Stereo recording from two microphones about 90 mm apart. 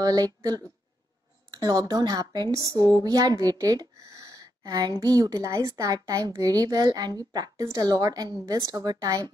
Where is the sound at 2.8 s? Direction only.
30° left (ahead or behind).